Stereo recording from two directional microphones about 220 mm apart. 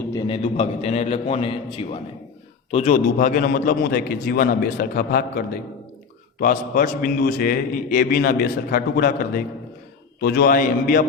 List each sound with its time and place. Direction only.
0.1 s a man's voice: 15° left (ahead or behind)
0.4 s a man's voice: 30° left (ahead or behind)
6.4 s a man's voice: 40° left (ahead or behind)